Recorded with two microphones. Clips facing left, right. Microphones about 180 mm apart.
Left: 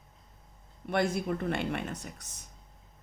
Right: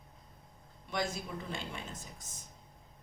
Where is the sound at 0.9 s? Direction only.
60° left (ahead or behind).